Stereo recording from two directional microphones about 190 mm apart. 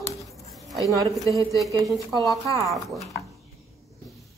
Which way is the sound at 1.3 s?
15° left (ahead or behind).